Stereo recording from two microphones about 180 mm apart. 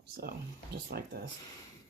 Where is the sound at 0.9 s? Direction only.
65° right (ahead or behind).